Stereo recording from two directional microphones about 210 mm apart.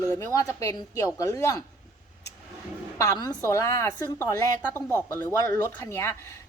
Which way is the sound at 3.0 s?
15° left (ahead or behind).